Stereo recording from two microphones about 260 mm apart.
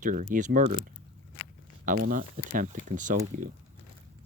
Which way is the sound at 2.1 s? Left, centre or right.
Right.